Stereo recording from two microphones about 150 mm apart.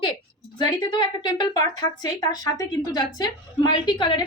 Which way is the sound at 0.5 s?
25° left (ahead or behind).